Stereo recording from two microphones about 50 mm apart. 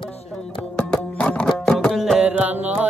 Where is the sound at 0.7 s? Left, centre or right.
Left.